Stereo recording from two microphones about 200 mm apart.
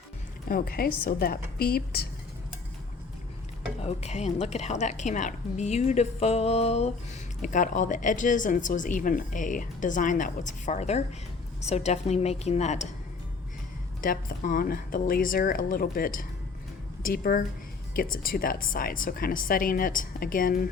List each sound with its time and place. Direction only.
0.4 s speech: 45° left (ahead or behind)
3.8 s a woman's voice: 35° left (ahead or behind)
14.0 s speech: 45° left (ahead or behind)